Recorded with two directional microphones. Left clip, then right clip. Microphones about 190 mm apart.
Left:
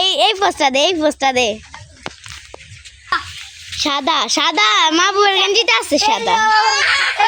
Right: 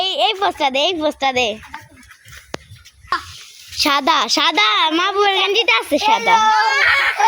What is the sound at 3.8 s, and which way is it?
A woman's voice, 5° right (ahead or behind).